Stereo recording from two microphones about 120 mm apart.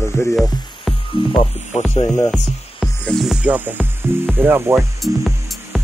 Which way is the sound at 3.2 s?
5° right (ahead or behind).